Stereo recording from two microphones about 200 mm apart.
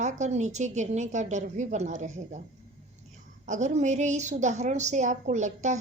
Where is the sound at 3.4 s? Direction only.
35° right (ahead or behind).